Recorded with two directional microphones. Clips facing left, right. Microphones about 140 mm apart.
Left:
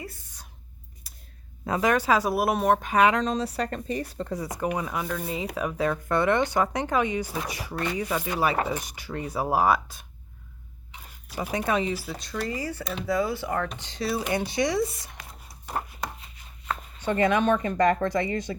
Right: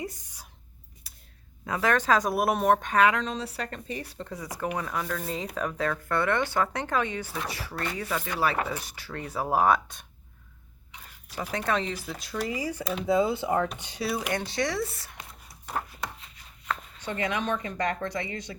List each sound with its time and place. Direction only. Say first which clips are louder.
0.0 s a sound: right 4 dB; 15° right (ahead or behind)
1.8 s speech: left 1 dB; 10° left (ahead or behind)
3.2 s speech: left 5 dB; 40° left (ahead or behind)
4.5 s speech: left 1 dB; 15° left (ahead or behind)
8.5 s speech: left 3 dB; 30° left (ahead or behind)
8.8 s speech: left 4 dB; 15° left (ahead or behind)
11.3 s speech: left 2 dB; 10° left (ahead or behind); by 13.1 s 5° right (ahead or behind)
13.1 s speech: right 2 dB; 20° right (ahead or behind)
14.0 s speech: left 2 dB; centre (ahead or behind)
14.3 s speech: left 4 dB; 15° left (ahead or behind)
17.0 s speech: left 9 dB; 50° left (ahead or behind)